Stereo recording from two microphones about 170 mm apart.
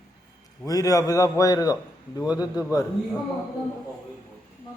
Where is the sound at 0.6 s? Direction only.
20° left (ahead or behind).